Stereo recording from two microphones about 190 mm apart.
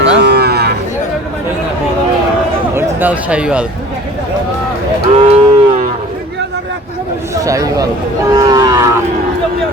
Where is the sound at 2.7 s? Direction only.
10° right (ahead or behind).